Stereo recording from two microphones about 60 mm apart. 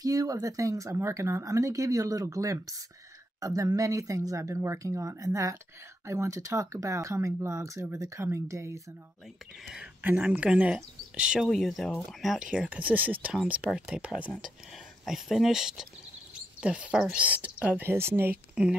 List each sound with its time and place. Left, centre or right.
0.0 s speech: right
2.2 s speech: right
3.3 s speech: right
8.2 s speech: right
10.0 s speech: right
11.4 s speech: centre
12.6 s speech: right
13.6 s speech: centre
15.0 s speech: centre; by 17.8 s right
17.8 s speech: right
18.5 s speech: centre